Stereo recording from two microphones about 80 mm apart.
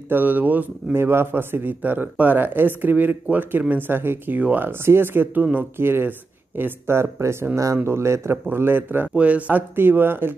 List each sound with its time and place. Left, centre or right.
0.1 s a man's voice: right